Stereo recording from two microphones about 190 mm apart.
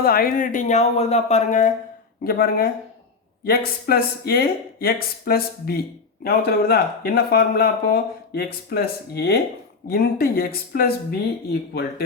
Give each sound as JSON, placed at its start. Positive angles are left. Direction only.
{"t": 0.0, "sound": "speech", "side_deg": 50}
{"t": 2.2, "sound": "speech", "side_deg": 50}